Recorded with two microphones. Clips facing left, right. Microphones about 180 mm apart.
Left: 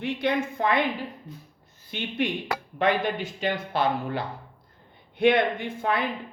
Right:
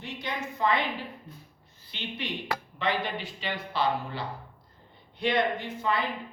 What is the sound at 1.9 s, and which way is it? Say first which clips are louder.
Speech: left 8 dB; 50° left (ahead or behind).